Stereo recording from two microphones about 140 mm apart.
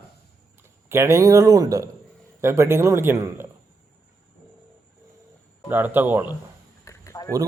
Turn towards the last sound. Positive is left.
turn(degrees=20)  # may be behind; listen again after turning